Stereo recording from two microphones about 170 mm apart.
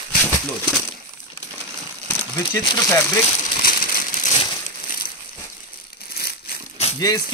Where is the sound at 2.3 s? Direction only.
20° left (ahead or behind).